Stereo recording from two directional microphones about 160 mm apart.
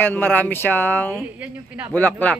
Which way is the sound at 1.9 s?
10° left (ahead or behind).